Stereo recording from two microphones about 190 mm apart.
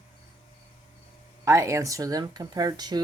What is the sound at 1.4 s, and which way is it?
Speech, 15° right (ahead or behind).